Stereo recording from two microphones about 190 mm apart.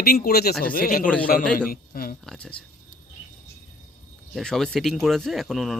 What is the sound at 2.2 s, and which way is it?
Speech, 5° left (ahead or behind).